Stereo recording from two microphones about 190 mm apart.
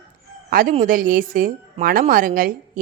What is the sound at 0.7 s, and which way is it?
A woman's voice, 45° right (ahead or behind).